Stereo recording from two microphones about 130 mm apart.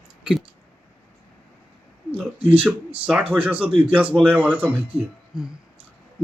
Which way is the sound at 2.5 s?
10° right (ahead or behind).